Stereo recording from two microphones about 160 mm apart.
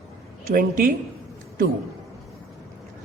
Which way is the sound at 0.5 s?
60° right (ahead or behind).